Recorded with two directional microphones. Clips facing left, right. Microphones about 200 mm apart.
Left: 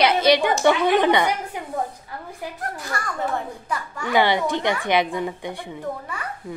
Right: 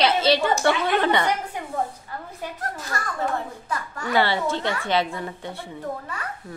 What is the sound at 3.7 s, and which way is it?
Speech, 15° left (ahead or behind).